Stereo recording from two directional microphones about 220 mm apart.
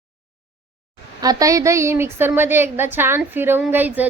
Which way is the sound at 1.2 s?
15° right (ahead or behind).